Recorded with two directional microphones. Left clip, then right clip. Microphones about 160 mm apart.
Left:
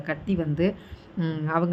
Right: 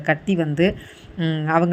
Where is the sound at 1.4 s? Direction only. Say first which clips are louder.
Right 7 dB; 20° right (ahead or behind).